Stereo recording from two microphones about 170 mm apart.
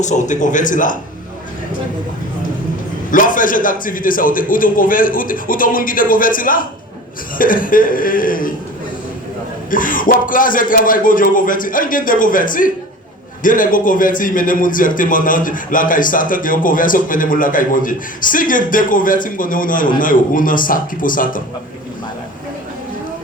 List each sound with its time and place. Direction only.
0.0 s a man's voice: 45° left (ahead or behind)
3.1 s a man's voice: 50° left (ahead or behind)
9.6 s a man's voice: 55° left (ahead or behind)